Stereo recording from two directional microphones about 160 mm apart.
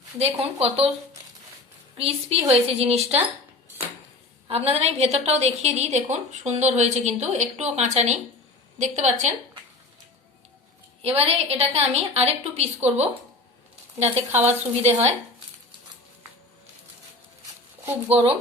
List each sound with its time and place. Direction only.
0.2 s a woman's voice: 40° right (ahead or behind)
2.0 s a woman's voice: 40° right (ahead or behind)
4.4 s a woman's voice: 40° right (ahead or behind)
11.0 s a woman's voice: 40° right (ahead or behind)